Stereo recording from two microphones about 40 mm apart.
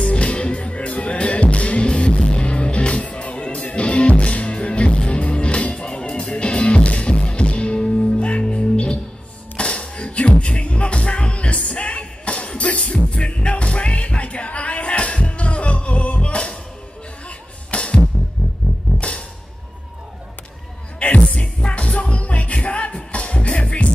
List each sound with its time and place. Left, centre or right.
0.0 s music: left
17.6 s music: left
21.0 s music: left